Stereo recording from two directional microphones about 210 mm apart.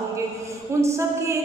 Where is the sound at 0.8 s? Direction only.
15° right (ahead or behind).